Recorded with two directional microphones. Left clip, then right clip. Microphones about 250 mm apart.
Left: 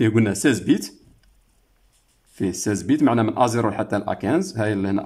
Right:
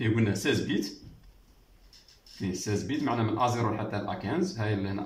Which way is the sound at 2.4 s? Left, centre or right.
Left.